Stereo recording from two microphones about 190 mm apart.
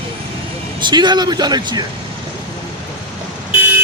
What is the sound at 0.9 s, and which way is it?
Speech, 25° right (ahead or behind).